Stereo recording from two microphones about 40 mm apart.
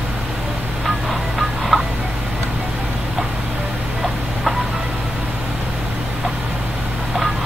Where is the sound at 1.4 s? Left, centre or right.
Centre.